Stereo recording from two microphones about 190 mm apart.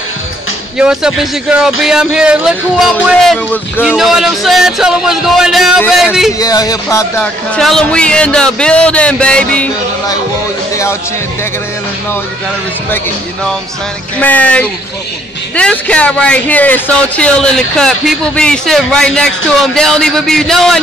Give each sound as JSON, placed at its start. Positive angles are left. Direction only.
{"t": 0.7, "sound": "speech", "side_deg": -5}
{"t": 6.4, "sound": "speech", "side_deg": 20}
{"t": 7.5, "sound": "speech", "side_deg": 5}
{"t": 14.2, "sound": "speech", "side_deg": 5}